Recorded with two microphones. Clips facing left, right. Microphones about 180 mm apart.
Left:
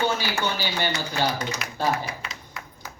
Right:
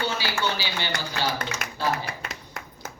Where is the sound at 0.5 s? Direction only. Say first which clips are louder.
Left 3 dB; 50° left (ahead or behind).